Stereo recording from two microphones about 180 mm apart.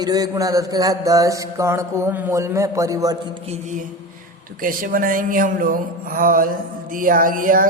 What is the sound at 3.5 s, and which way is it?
Music, 45° right (ahead or behind).